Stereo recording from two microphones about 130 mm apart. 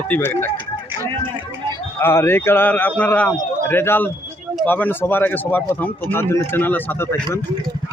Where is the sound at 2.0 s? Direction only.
20° left (ahead or behind).